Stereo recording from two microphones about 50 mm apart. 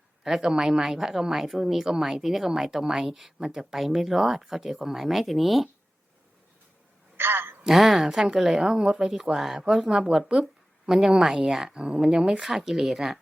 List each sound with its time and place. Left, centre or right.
0.3 s speech: centre
7.2 s a sound: right
7.6 s speech: centre
11.7 s speech: centre